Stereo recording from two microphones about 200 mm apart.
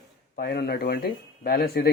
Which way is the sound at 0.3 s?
50° left (ahead or behind).